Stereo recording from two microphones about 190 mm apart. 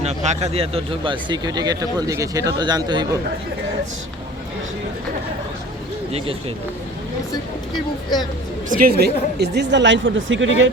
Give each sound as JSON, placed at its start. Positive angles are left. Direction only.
{"t": 0.0, "sound": "speech", "side_deg": -35}
{"t": 6.1, "sound": "speech", "side_deg": -30}
{"t": 8.7, "sound": "a woman's voice", "side_deg": -50}